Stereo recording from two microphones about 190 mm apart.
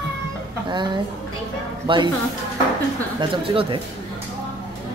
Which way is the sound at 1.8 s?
25° right (ahead or behind).